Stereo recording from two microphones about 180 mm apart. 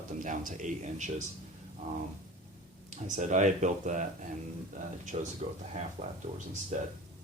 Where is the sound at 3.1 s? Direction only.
40° right (ahead or behind).